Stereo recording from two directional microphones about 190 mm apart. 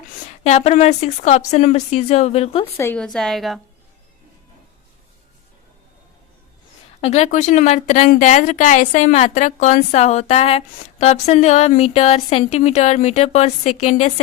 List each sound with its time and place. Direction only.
0.4 s speech: 35° left (ahead or behind)
2.7 s a woman's voice: 10° left (ahead or behind)
7.0 s speech: 35° left (ahead or behind)